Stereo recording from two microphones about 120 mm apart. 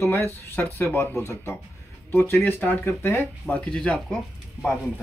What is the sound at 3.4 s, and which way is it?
Speech, 5° left (ahead or behind).